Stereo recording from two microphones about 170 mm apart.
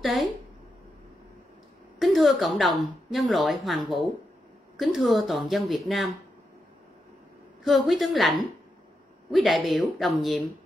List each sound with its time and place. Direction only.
0.0 s a woman's voice: centre (ahead or behind)
2.0 s a woman's voice: centre (ahead or behind)
7.6 s a woman's voice: centre (ahead or behind)